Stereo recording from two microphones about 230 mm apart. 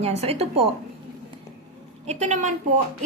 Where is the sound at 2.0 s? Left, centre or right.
Right.